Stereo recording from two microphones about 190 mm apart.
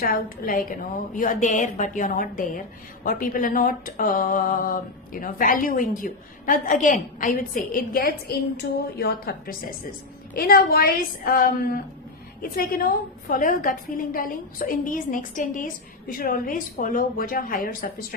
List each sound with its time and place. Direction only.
0.0 s speech: 45° left (ahead or behind)